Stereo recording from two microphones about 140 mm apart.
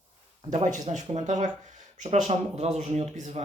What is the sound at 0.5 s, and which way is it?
Speech, 55° right (ahead or behind).